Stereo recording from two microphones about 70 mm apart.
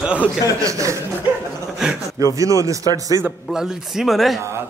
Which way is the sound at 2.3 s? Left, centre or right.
Right.